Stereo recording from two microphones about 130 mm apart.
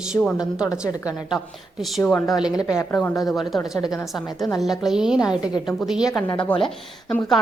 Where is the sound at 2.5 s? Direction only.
25° left (ahead or behind).